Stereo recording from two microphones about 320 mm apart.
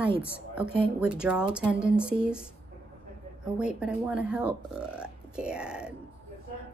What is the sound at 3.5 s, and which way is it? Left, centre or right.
Speech, centre.